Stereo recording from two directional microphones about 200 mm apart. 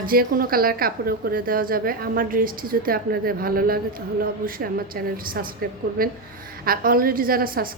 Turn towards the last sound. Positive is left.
turn(degrees=-45)  # may be behind; listen again after turning